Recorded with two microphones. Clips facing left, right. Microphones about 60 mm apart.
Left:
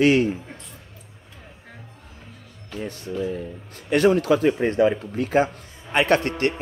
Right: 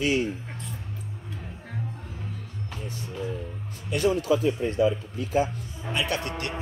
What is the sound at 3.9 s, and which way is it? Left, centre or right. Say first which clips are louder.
Speech: left 6 dB; left.